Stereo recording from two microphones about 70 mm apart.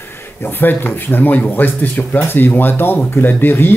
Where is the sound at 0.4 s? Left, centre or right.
Left.